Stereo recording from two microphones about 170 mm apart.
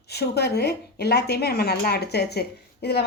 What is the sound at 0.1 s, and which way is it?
Speech, 75° left (ahead or behind).